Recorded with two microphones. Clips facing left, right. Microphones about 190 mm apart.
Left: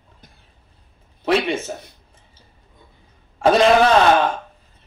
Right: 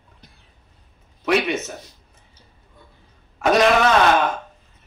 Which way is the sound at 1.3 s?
30° left (ahead or behind).